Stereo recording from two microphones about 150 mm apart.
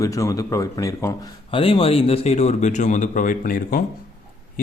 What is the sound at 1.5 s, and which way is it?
Speech, 35° left (ahead or behind).